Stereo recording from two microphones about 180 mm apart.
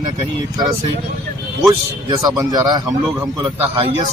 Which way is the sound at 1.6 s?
20° right (ahead or behind).